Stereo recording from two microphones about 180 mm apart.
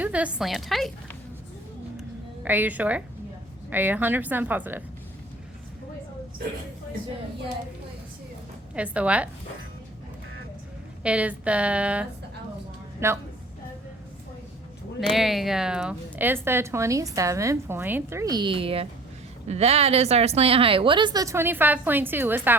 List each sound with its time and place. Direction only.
0.0 s a woman's voice: 5° right (ahead or behind)
2.4 s a woman's voice: 10° right (ahead or behind)
8.7 s a woman's voice: 5° right (ahead or behind)
11.0 s a woman's voice: 5° right (ahead or behind)
15.1 s a woman's voice: centre (ahead or behind)